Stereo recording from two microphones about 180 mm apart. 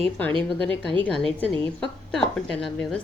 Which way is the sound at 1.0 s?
5° left (ahead or behind).